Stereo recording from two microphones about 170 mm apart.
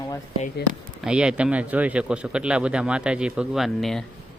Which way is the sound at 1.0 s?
5° right (ahead or behind).